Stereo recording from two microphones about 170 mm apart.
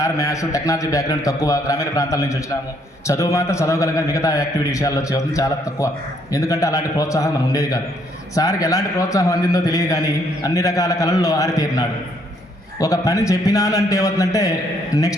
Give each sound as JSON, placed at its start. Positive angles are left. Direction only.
{"t": 0.0, "sound": "a man's voice", "side_deg": 20}